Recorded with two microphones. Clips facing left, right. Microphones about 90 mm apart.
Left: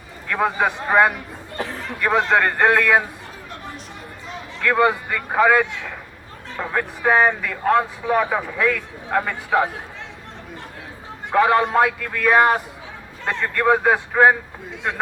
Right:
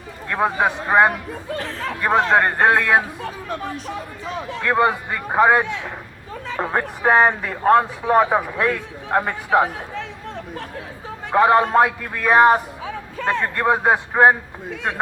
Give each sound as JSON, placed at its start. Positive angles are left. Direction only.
{"t": 0.3, "sound": "a man's voice", "side_deg": -20}
{"t": 4.6, "sound": "a man's voice", "side_deg": -20}
{"t": 11.3, "sound": "a man's voice", "side_deg": -25}